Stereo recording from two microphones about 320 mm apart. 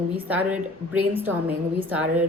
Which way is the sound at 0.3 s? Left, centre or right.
Centre.